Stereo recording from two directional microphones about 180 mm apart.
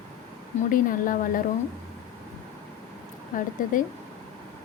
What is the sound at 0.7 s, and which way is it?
Speech, 50° left (ahead or behind).